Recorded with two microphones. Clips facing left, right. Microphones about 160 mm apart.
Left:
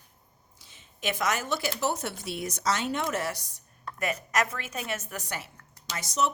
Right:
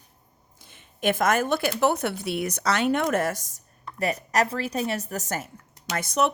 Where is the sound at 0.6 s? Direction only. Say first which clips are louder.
Right 8 dB; 55° right (ahead or behind).